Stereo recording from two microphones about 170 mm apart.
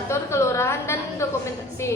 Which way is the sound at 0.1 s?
15° left (ahead or behind).